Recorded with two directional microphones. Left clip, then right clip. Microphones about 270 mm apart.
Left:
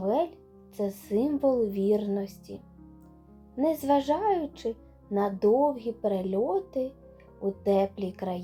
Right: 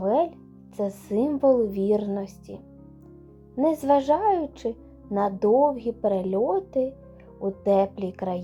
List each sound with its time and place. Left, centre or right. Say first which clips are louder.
0.0 s music: right 4 dB; centre
0.8 s a child's voice: right 3 dB; centre